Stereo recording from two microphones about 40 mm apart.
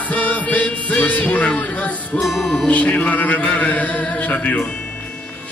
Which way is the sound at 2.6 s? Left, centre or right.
Left.